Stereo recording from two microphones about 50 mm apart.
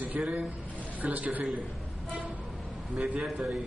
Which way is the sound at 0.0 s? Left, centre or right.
Right.